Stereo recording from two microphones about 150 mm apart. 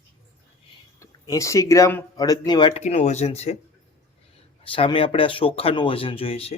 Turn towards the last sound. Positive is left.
turn(degrees=40)  # may be behind; listen again after turning